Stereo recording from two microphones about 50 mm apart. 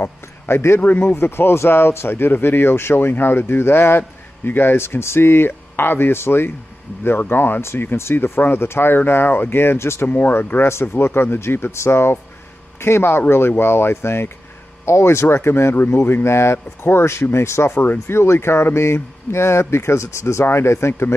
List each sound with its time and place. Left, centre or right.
0.7 s speech: left
1.1 s speech: left
10.0 s speech: left
10.3 s speech: left
14.9 s speech: left
15.7 s speech: left
16.0 s speech: left